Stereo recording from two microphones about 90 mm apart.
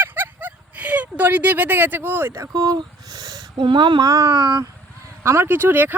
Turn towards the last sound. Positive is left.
turn(degrees=-20)  # may be behind; listen again after turning